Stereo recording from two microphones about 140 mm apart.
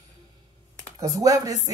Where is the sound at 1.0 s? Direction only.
25° right (ahead or behind).